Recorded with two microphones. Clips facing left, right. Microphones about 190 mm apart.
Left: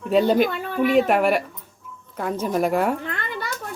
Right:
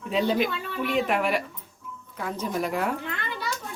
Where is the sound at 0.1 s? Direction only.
45° left (ahead or behind).